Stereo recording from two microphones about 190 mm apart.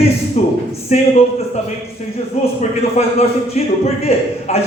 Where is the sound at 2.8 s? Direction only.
35° left (ahead or behind).